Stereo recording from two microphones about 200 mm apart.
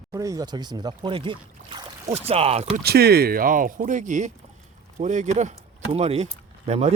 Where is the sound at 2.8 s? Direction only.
55° right (ahead or behind); by 6.9 s 30° right (ahead or behind).